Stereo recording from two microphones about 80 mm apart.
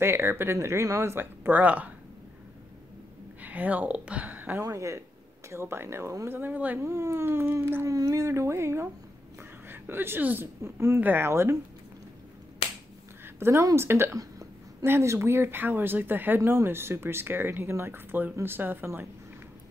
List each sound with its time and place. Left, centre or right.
0.0 s speech: right
3.4 s speech: centre
4.6 s speech: right
6.9 s speech: right
13.2 s a sound: right
13.7 s speech: right